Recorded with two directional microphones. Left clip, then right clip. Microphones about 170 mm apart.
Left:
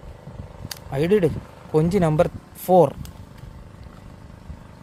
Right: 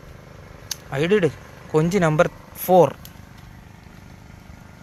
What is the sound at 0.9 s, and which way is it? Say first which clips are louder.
Speech: even; 15° left (ahead or behind).